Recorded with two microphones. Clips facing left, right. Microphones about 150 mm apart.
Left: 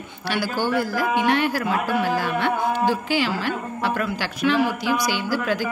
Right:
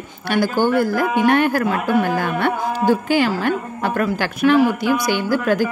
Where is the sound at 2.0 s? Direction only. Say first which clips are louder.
Right 3 dB; 55° right (ahead or behind).